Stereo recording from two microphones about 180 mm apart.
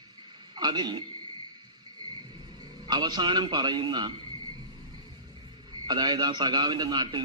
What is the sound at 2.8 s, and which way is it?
A man's voice, 25° right (ahead or behind).